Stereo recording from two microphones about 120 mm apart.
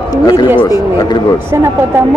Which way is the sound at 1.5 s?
20° right (ahead or behind).